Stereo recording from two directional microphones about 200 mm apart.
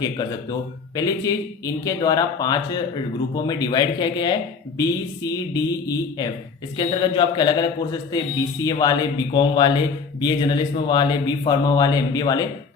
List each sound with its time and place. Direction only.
0.0 s a man's voice: 20° left (ahead or behind)